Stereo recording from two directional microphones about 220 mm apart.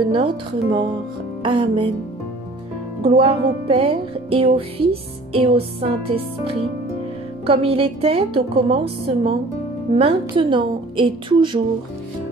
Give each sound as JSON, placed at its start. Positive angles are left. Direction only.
{"t": 0.1, "sound": "music", "side_deg": -20}
{"t": 3.0, "sound": "music", "side_deg": -25}